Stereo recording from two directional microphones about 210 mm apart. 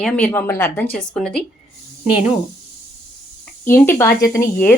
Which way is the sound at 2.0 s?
5° right (ahead or behind).